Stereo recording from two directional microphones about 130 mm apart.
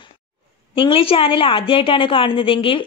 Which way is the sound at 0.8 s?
45° left (ahead or behind).